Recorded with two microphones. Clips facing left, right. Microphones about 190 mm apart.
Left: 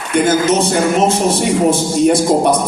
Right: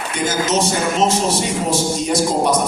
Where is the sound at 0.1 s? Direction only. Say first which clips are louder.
Left 7 dB; 55° left (ahead or behind).